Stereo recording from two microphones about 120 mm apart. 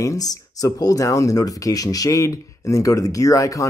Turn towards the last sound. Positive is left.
turn(degrees=25)  # may be behind; listen again after turning